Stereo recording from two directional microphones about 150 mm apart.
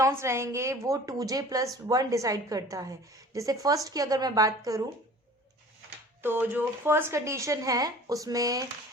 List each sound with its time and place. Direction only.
0.0 s a woman's voice: 20° right (ahead or behind)
6.2 s a woman's voice: 15° right (ahead or behind)